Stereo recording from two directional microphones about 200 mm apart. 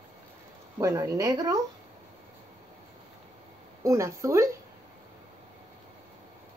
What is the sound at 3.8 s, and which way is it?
Speech, 15° right (ahead or behind).